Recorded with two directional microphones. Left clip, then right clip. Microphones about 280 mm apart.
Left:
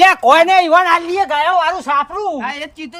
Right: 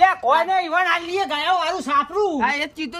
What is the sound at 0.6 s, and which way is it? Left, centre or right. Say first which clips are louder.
A man's voice: left 9 dB; left.